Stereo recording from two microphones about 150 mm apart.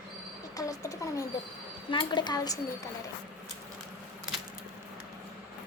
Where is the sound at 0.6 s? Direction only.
20° left (ahead or behind).